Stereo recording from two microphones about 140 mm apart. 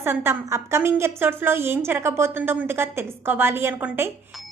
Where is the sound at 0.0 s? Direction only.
15° right (ahead or behind).